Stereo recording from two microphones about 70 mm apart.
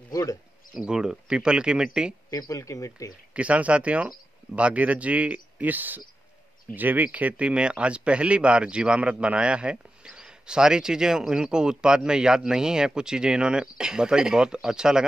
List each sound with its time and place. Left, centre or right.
0.1 s speech: left
0.7 s speech: centre
2.3 s speech: left
3.3 s speech: centre